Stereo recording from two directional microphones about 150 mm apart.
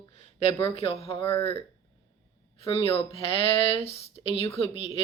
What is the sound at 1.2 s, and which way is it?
Speech, 15° left (ahead or behind).